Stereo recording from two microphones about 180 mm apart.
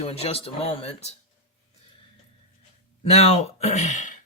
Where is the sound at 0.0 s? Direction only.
35° left (ahead or behind).